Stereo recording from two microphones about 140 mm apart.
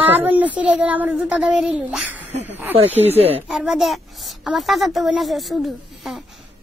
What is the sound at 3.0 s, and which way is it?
Speech, 45° right (ahead or behind).